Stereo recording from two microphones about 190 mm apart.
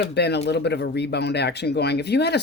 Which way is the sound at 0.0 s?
60° left (ahead or behind).